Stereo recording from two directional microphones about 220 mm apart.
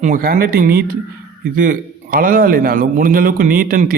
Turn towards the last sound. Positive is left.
turn(degrees=-40)  # may be behind; listen again after turning